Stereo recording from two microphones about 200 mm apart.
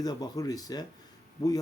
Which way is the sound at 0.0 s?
20° left (ahead or behind).